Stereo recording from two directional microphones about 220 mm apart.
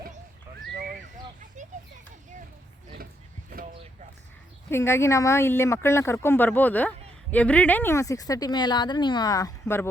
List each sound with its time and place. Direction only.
1.6 s children playing: 35° right (ahead or behind)
4.7 s speech: 10° left (ahead or behind)